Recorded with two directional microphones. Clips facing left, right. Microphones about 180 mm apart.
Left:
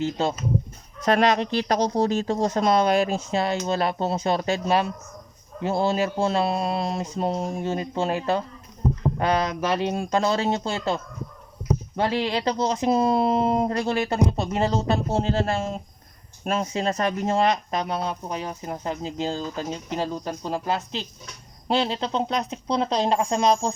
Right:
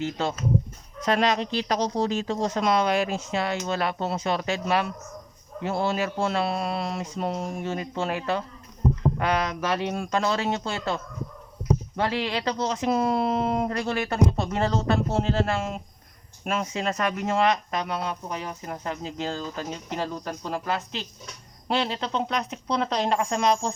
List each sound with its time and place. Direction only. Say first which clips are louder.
0.0 s speech: left 3 dB; 30° left (ahead or behind)
1.0 s speech: left 3 dB; 60° left (ahead or behind); by 23.6 s 35° left (ahead or behind)